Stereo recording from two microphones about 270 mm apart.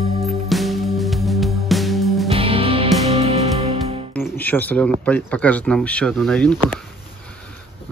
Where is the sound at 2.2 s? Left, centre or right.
Right.